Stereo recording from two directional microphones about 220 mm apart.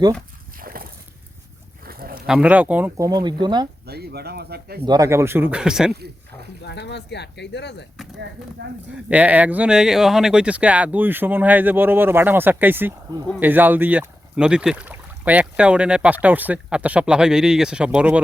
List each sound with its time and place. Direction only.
0.6 s a sound: 40° right (ahead or behind)
2.2 s speech: 5° right (ahead or behind)
3.1 s speech: 20° right (ahead or behind)
3.8 s speech: 45° right (ahead or behind)
4.9 s speech: 15° right (ahead or behind)
6.7 s speech: 50° left (ahead or behind)
8.6 s speech: 50° right (ahead or behind)
9.0 s speech: 5° right (ahead or behind)